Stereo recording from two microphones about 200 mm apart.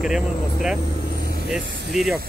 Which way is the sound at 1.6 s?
60° right (ahead or behind).